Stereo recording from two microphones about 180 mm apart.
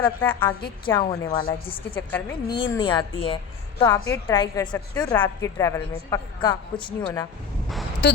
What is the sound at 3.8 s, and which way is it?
A woman's voice, 20° left (ahead or behind).